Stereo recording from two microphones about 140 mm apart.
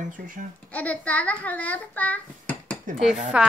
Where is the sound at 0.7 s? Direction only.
10° left (ahead or behind).